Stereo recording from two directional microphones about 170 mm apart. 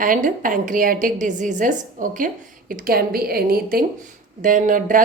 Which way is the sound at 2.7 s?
60° right (ahead or behind).